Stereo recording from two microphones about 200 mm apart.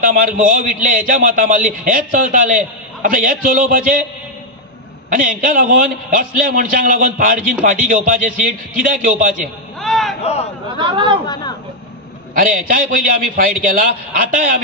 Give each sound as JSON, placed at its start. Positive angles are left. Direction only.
{"t": 0.0, "sound": "a man's voice", "side_deg": -45}
{"t": 5.1, "sound": "a man's voice", "side_deg": -45}
{"t": 9.8, "sound": "a sound", "side_deg": 0}
{"t": 10.2, "sound": "speech", "side_deg": 30}
{"t": 10.8, "sound": "speech", "side_deg": -25}
{"t": 12.4, "sound": "a man's voice", "side_deg": -45}